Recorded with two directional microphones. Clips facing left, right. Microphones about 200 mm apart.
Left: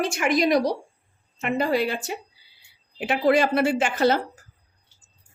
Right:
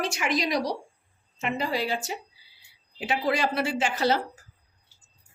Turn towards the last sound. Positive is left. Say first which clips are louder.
# left 4 dB
turn(degrees=50)  # may be behind; listen again after turning